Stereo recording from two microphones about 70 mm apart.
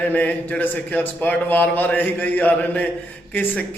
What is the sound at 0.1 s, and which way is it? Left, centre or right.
A man's voice, left.